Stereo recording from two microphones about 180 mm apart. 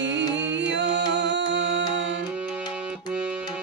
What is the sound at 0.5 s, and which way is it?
Music, 85° right.